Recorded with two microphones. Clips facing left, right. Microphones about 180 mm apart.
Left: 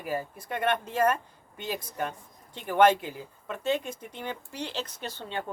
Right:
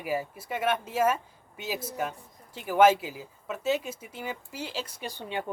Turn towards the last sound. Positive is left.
turn(degrees=-15)  # may be behind; listen again after turning